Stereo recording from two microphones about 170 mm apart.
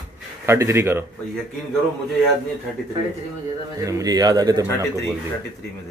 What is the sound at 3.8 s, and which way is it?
Speech, 20° right (ahead or behind).